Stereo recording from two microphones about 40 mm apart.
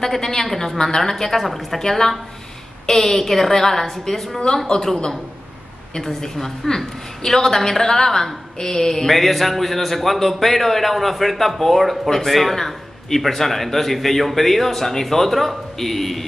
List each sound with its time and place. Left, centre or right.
0.0 s a woman's voice: centre
9.1 s a man's voice: centre